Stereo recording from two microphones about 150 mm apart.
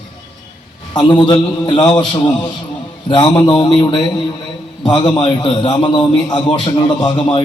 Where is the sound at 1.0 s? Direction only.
30° left (ahead or behind).